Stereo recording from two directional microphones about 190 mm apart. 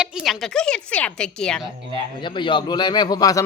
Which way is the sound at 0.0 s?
5° right (ahead or behind).